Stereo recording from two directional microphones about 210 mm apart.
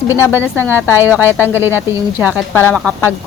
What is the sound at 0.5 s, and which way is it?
Speech, 10° left (ahead or behind).